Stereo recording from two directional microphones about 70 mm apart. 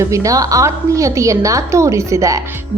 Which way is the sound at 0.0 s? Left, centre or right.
Right.